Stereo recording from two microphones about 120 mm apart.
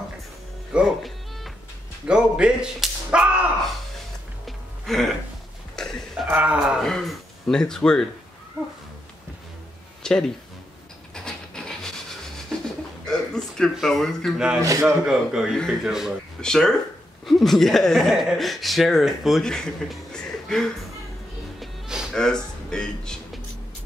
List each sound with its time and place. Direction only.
0.7 s music: centre (ahead or behind)
2.0 s speech: 5° right (ahead or behind)
4.5 s music: centre (ahead or behind)
6.2 s speech: 10° right (ahead or behind); by 8.0 s 5° left (ahead or behind)
10.0 s speech: 5° left (ahead or behind)
11.1 s rub: 5° left (ahead or behind)
12.5 s pigeon: 5° left (ahead or behind)
13.0 s speech: 5° left (ahead or behind)
14.6 s a man's voice: 25° right (ahead or behind)
15.0 s speech: 5° right (ahead or behind)
21.5 s music: 5° right (ahead or behind)
22.1 s speech: 5° left (ahead or behind)